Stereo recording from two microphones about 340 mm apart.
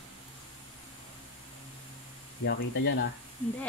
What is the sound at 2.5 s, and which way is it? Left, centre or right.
Speech, left.